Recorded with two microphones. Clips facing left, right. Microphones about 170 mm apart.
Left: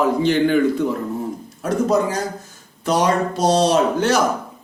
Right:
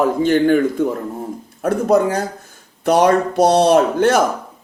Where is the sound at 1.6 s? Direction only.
60° right (ahead or behind).